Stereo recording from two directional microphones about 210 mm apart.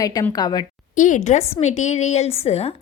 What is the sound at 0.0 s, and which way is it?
Speech, 15° left (ahead or behind).